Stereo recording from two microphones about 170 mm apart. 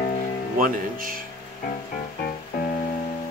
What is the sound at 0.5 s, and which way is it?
Speech, 55° right (ahead or behind).